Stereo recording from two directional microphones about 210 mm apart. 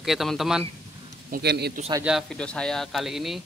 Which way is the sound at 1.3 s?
50° right (ahead or behind).